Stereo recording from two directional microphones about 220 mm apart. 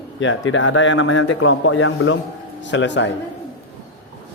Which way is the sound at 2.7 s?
55° left (ahead or behind).